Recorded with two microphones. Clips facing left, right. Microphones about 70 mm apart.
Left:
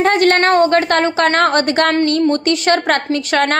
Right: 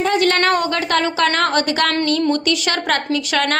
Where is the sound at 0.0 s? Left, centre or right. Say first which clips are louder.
Left 4 dB; left.